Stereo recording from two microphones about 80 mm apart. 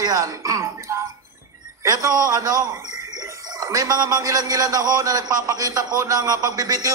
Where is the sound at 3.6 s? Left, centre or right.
Right.